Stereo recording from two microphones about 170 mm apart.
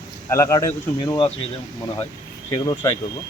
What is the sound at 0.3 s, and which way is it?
Speech, 15° left (ahead or behind).